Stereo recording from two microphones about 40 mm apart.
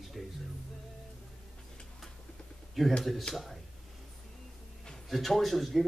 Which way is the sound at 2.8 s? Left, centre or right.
Centre.